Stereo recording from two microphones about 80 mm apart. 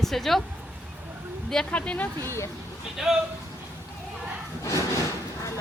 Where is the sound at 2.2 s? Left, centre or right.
Left.